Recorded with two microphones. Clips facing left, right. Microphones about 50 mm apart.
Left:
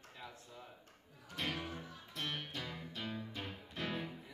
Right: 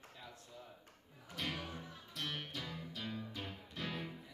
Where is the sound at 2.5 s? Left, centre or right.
Centre.